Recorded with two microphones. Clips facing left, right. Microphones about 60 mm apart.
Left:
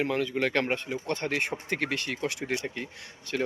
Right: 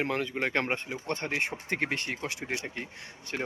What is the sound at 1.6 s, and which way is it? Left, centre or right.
Speech, right.